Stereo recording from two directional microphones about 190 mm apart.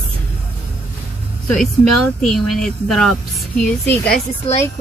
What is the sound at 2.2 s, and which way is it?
A woman's voice, centre (ahead or behind).